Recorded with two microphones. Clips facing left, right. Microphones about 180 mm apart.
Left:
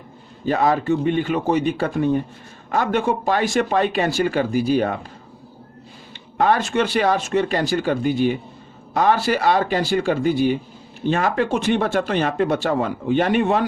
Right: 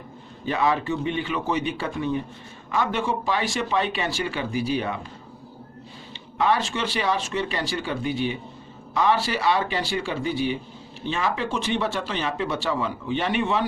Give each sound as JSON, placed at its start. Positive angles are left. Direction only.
{"t": 0.4, "sound": "speech", "side_deg": 40}
{"t": 6.3, "sound": "speech", "side_deg": 50}